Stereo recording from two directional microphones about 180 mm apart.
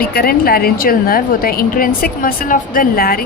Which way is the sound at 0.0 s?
55° left (ahead or behind).